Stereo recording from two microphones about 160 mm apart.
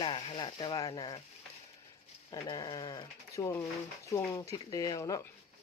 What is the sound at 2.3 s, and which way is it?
Speech, 25° left (ahead or behind).